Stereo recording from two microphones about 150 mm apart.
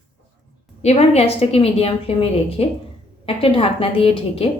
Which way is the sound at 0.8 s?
45° left (ahead or behind).